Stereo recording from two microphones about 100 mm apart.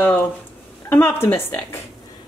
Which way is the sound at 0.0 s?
20° left (ahead or behind).